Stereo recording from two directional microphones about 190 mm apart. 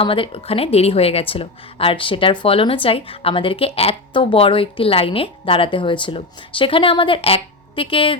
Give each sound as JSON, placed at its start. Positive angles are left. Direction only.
{"t": 0.0, "sound": "speech", "side_deg": 30}